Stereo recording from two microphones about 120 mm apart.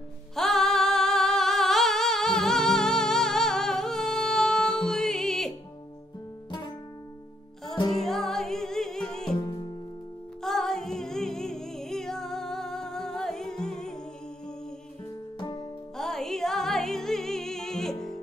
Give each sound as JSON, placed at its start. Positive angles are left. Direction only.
{"t": 0.4, "sound": "singing", "side_deg": 0}
{"t": 7.9, "sound": "music", "side_deg": 5}
{"t": 9.4, "sound": "music", "side_deg": 40}
{"t": 10.4, "sound": "music", "side_deg": 5}
{"t": 15.3, "sound": "music", "side_deg": 40}
{"t": 16.0, "sound": "music", "side_deg": 5}